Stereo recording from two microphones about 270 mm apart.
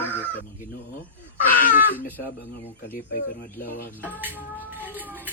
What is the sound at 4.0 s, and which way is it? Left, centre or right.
Speech, centre.